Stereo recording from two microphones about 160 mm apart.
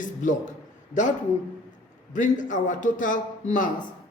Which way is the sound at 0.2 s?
55° left (ahead or behind).